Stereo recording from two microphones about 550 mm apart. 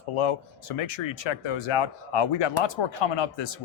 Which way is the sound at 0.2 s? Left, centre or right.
Left.